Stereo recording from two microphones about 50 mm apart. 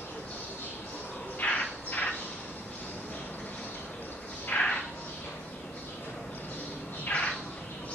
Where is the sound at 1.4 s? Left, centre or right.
Left.